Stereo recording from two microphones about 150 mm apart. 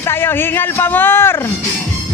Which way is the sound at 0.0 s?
15° left (ahead or behind).